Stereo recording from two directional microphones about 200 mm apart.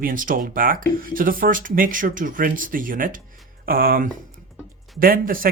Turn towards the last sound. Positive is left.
turn(degrees=-45)  # may be behind; listen again after turning